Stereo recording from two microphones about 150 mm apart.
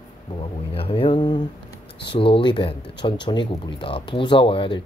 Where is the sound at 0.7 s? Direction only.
40° left (ahead or behind).